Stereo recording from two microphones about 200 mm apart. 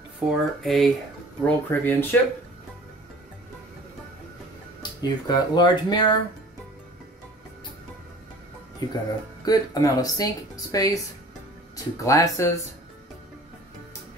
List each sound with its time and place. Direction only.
0.3 s speech: centre (ahead or behind)
5.0 s speech: 20° left (ahead or behind)
8.8 s speech: 20° left (ahead or behind)